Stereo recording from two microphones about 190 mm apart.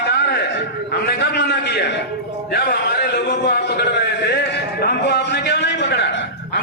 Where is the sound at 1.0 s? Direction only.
60° left (ahead or behind).